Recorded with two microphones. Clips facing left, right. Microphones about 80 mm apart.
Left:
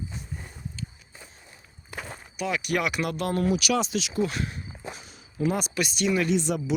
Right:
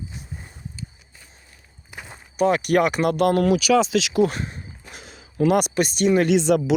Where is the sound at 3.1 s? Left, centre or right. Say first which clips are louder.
Right 8 dB; right.